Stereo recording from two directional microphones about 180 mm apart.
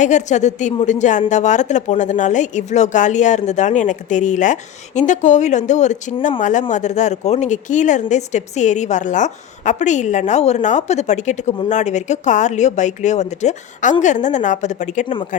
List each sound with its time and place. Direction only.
0.0 s a woman's voice: 40° left (ahead or behind)